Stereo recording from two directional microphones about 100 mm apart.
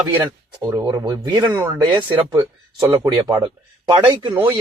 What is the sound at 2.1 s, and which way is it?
Speech, 55° right (ahead or behind).